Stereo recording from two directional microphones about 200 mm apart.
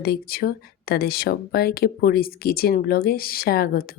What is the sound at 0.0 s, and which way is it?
Speech, 50° left (ahead or behind).